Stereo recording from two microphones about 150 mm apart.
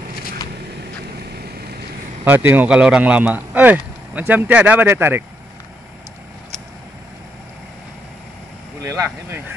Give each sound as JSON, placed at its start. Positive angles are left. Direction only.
{"t": 2.2, "sound": "speech", "side_deg": -15}
{"t": 8.8, "sound": "speech", "side_deg": -20}